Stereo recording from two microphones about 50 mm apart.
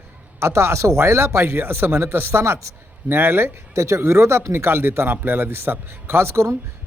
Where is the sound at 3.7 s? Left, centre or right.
Right.